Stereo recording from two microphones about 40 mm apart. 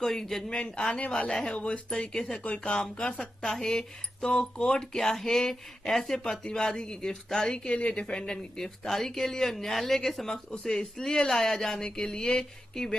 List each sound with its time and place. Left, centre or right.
0.0 s speech: centre
0.7 s speech: left
2.3 s speech: left
3.4 s speech: centre